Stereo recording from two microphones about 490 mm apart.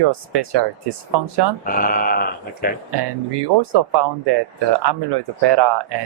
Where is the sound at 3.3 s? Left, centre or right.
Right.